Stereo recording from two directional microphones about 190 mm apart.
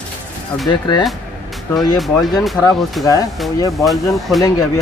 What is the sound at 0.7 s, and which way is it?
Speech, 25° left (ahead or behind).